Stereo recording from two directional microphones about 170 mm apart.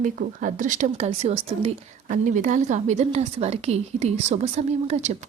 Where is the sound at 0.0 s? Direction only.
50° right (ahead or behind); by 1.7 s 35° right (ahead or behind).